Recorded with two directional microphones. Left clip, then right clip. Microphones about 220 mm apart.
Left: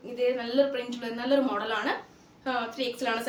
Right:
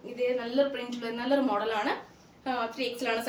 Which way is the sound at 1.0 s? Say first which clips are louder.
Left 1 dB; 15° left (ahead or behind).